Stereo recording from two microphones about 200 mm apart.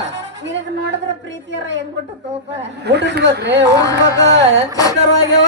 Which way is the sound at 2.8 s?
60° right (ahead or behind).